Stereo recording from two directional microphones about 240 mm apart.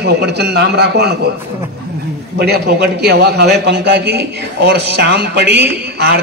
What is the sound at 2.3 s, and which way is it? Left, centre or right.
A man's voice, right.